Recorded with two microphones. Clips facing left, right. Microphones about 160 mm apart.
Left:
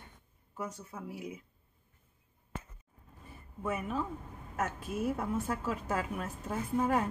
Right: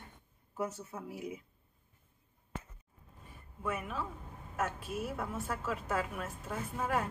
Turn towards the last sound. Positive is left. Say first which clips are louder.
# left 6 dB
turn(degrees=35)  # may be behind; listen again after turning